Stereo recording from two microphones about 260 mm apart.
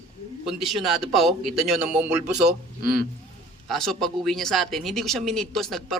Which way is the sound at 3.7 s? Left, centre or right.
Centre.